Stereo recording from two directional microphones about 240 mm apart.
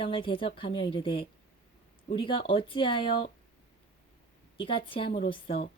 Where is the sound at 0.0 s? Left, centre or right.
Left.